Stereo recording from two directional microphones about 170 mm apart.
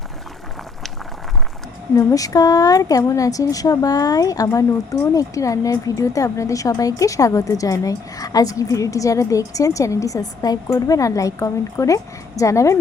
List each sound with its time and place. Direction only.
2.0 s speech: 20° left (ahead or behind)